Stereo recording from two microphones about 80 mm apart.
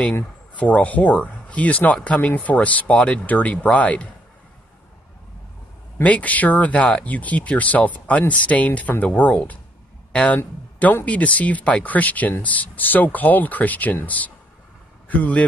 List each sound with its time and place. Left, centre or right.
0.0 s speech: centre
6.0 s a man's voice: centre